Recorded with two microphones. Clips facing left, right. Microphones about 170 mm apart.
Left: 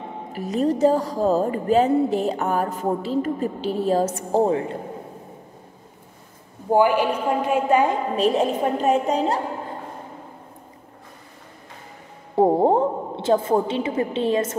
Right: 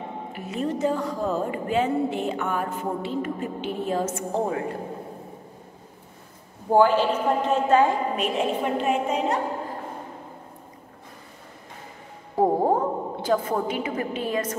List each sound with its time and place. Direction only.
0.3 s speech: 40° left (ahead or behind)
6.7 s a woman's voice: 15° left (ahead or behind)
8.2 s speech: 35° left (ahead or behind)
12.4 s a woman's voice: 25° left (ahead or behind)